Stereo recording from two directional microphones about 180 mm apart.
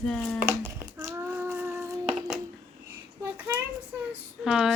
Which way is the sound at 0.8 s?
20° right (ahead or behind).